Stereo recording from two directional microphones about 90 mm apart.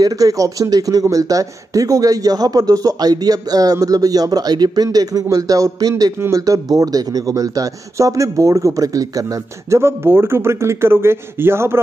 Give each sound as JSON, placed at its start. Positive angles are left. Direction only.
{"t": 0.0, "sound": "speech", "side_deg": -40}